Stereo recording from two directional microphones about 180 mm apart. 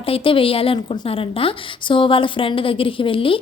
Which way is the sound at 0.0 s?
30° left (ahead or behind).